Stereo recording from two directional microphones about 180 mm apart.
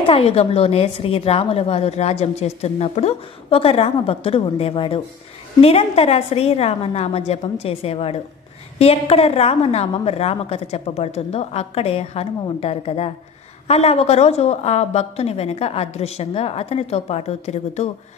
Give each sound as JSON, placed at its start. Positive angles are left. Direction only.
{"t": 0.0, "sound": "speech", "side_deg": 35}